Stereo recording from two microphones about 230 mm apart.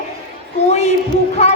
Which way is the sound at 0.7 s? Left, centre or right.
Left.